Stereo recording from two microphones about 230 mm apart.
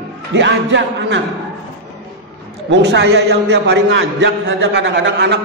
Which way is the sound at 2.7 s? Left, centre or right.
Right.